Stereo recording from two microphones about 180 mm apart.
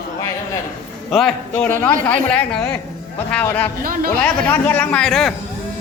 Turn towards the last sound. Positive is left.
turn(degrees=0)  # may be behind; listen again after turning